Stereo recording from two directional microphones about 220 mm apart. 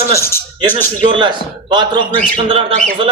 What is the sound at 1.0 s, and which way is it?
A man's voice, 20° right (ahead or behind).